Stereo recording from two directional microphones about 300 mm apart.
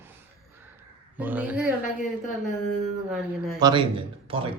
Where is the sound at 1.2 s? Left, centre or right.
Centre.